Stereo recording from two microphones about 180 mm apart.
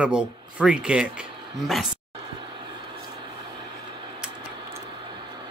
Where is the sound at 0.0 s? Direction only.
5° right (ahead or behind).